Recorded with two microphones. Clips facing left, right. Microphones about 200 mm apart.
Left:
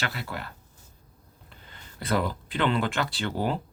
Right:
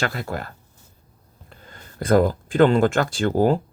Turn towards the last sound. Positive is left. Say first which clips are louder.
# right 10 dB
turn(degrees=-45)  # may be behind; listen again after turning